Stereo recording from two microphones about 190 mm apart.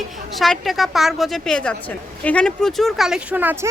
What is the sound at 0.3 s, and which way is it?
Speech, centre (ahead or behind).